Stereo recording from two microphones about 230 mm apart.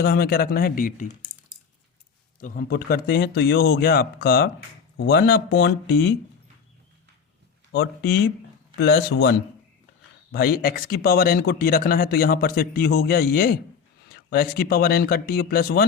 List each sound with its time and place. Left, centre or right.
0.0 s speech: left
2.4 s speech: left
7.7 s speech: left
10.3 s speech: left